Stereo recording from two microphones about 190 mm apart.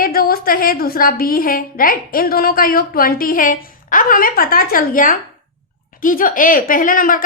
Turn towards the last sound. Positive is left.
turn(degrees=45)  # may be behind; listen again after turning